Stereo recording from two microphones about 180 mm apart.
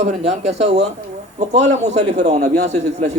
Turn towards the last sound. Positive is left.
turn(degrees=-40)  # may be behind; listen again after turning